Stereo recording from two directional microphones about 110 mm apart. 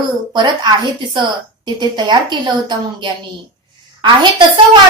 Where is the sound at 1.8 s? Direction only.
40° right (ahead or behind).